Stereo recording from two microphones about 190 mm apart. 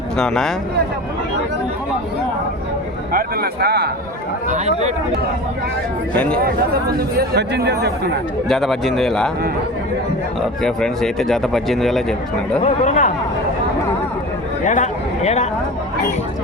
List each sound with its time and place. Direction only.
0.2 s speech: centre (ahead or behind)
3.1 s speech: 50° right (ahead or behind)
4.4 s speech: 35° right (ahead or behind)
7.2 s speech: 60° right (ahead or behind)
8.4 s speech: centre (ahead or behind)
10.4 s speech: 5° left (ahead or behind)
12.6 s speech: 40° left (ahead or behind)
14.6 s a sound: 40° left (ahead or behind)